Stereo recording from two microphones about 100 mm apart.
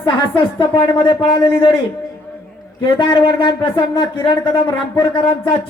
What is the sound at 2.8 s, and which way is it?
Speech, 60° left (ahead or behind).